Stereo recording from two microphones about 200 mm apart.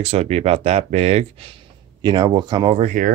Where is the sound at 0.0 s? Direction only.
30° right (ahead or behind).